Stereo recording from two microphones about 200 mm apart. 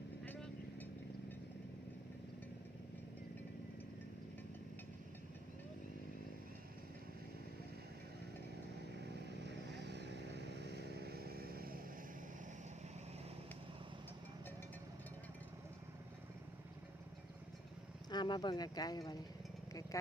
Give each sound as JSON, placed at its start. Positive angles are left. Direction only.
{"t": 0.3, "sound": "vehicle", "side_deg": 10}
{"t": 9.0, "sound": "vehicle", "side_deg": -55}
{"t": 18.1, "sound": "speech", "side_deg": 20}